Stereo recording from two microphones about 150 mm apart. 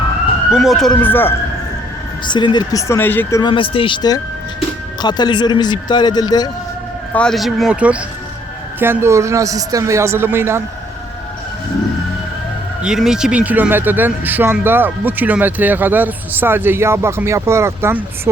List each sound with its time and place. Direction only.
0.5 s speech: centre (ahead or behind)
0.9 s speech: 15° left (ahead or behind)
2.2 s speech: 30° left (ahead or behind)
3.5 s speech: 35° left (ahead or behind)
7.1 s speech: 5° left (ahead or behind); by 10.6 s 15° right (ahead or behind)
12.8 s speech: 5° right (ahead or behind)